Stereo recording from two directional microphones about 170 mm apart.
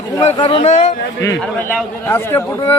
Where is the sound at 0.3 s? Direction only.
25° left (ahead or behind).